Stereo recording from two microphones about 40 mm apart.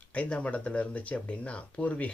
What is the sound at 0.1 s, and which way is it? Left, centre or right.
Speech, left.